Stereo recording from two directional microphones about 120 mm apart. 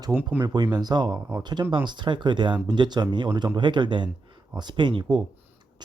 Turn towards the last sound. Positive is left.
turn(degrees=-40)  # may be behind; listen again after turning